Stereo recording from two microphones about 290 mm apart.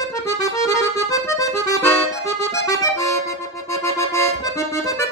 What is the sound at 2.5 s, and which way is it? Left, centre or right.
Accordion, centre.